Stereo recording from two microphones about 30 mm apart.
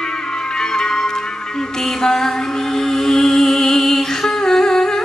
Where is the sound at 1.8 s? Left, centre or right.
Centre.